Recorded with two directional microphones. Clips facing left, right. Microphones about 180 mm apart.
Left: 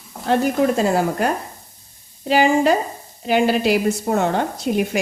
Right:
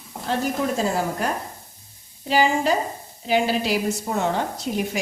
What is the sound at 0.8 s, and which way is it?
A woman's voice, 65° left (ahead or behind).